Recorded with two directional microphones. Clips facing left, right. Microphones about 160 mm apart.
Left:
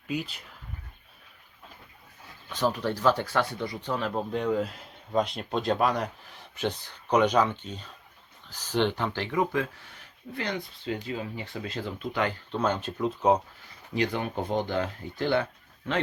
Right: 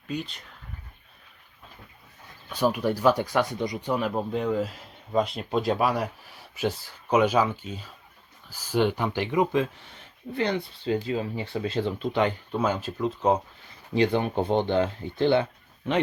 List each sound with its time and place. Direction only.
0.1 s speech: 5° left (ahead or behind)
2.5 s speech: 10° right (ahead or behind)
12.5 s speech: 5° right (ahead or behind)
13.9 s speech: 30° right (ahead or behind)